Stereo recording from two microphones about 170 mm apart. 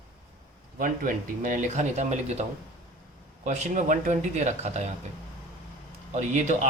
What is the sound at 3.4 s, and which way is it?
Speech, 45° right (ahead or behind).